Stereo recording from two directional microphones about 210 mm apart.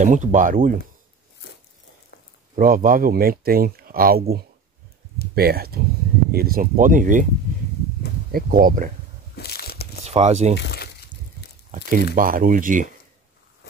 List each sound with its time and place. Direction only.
0.0 s speech: 35° right (ahead or behind)
2.5 s speech: 40° right (ahead or behind)
8.3 s speech: 45° right (ahead or behind)
9.3 s crushing: 50° left (ahead or behind)
10.0 s speech: 30° right (ahead or behind)
10.6 s a sound: 50° left (ahead or behind)
12.2 s speech: 40° right (ahead or behind)